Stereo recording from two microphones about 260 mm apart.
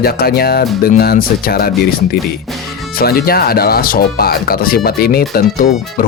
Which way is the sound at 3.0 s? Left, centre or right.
Left.